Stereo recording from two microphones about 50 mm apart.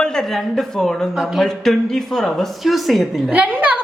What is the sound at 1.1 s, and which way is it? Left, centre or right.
Speech, centre.